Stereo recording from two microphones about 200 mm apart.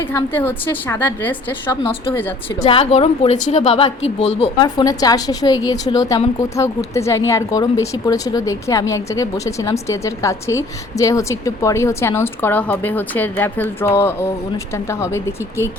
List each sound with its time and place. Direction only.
0.1 s a woman's voice: 10° left (ahead or behind)
1.8 s a woman's voice: 25° left (ahead or behind)